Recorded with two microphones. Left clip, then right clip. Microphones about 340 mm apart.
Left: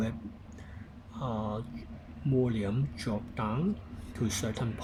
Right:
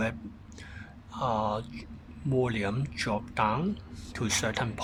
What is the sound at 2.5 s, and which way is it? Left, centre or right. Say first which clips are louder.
Speech: right 3 dB; right.